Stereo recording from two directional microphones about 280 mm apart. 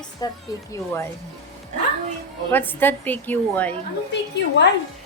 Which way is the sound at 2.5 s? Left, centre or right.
Centre.